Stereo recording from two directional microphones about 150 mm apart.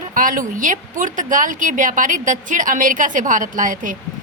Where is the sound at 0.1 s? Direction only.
65° right (ahead or behind).